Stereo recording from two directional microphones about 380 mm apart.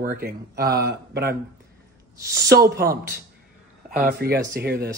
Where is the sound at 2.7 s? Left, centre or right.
Right.